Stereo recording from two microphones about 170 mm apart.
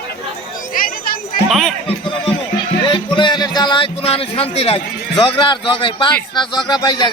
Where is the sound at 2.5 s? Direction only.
30° left (ahead or behind).